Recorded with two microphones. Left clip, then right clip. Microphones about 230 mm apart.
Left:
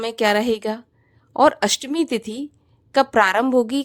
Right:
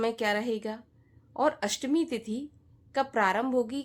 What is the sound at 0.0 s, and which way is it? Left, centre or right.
A woman's voice, left.